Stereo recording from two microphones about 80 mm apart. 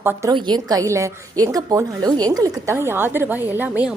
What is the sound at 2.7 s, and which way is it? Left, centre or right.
A woman's voice, right.